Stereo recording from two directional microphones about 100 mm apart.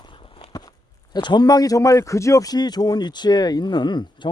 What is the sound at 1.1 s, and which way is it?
Speech, 45° left (ahead or behind).